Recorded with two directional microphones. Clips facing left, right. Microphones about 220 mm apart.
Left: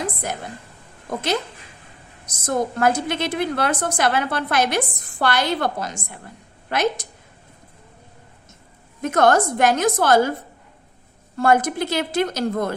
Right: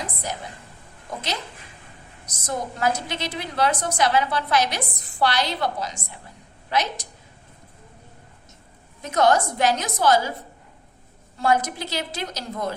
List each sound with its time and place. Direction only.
0.0 s a sound: 50° left (ahead or behind)
2.2 s a woman's voice: 55° left (ahead or behind)
9.0 s a woman's voice: 55° left (ahead or behind)
11.3 s a woman's voice: 50° left (ahead or behind)